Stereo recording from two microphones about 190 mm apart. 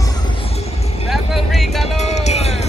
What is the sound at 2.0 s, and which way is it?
Music, 35° left (ahead or behind).